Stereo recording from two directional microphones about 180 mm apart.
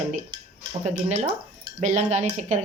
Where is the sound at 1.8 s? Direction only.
40° right (ahead or behind).